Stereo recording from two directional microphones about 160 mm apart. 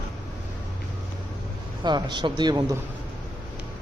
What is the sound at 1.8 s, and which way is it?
Speech, 30° right (ahead or behind).